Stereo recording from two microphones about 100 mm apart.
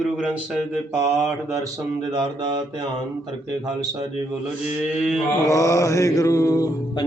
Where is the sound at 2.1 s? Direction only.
45° right (ahead or behind).